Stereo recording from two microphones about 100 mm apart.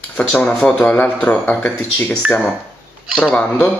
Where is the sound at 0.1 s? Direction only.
15° left (ahead or behind).